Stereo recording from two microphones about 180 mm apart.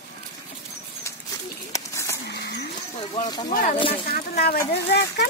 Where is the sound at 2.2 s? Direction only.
65° left (ahead or behind).